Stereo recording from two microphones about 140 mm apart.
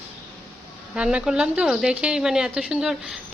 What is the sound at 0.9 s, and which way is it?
A woman's voice, 5° right (ahead or behind).